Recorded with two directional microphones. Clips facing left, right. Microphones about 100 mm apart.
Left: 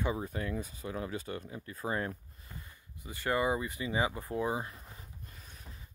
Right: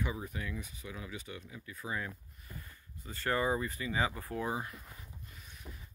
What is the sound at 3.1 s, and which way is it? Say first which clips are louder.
Speech: left 1 dB; 15° left (ahead or behind).